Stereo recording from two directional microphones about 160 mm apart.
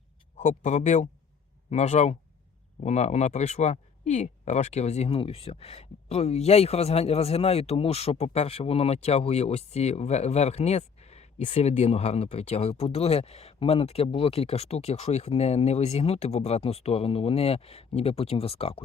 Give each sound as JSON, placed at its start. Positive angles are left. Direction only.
{"t": 0.3, "sound": "speech", "side_deg": 40}